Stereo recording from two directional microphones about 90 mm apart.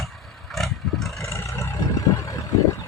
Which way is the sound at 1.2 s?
35° left (ahead or behind).